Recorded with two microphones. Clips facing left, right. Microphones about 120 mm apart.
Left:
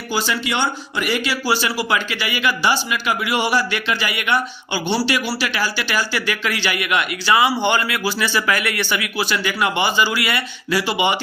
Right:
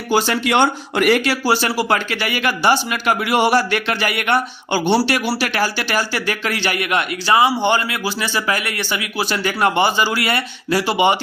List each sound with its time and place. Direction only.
0.1 s a man's voice: 55° right (ahead or behind)